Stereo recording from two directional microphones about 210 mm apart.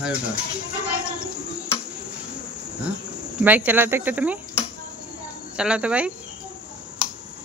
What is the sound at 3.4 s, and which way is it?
Speech, 10° right (ahead or behind).